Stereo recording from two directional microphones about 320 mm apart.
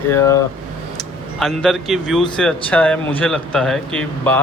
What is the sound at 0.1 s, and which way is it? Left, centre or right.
Speech, centre.